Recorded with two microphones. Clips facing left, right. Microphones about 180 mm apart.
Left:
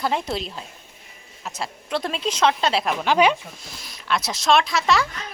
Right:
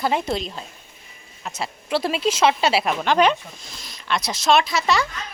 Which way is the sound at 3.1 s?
10° left (ahead or behind).